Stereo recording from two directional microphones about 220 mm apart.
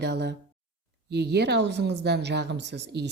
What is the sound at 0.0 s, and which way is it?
A woman's voice, 50° right (ahead or behind).